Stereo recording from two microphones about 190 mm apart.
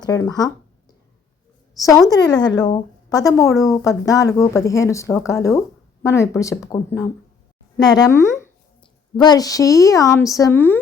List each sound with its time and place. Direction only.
0.0 s speech: 20° left (ahead or behind)
1.7 s a woman's voice: 20° left (ahead or behind)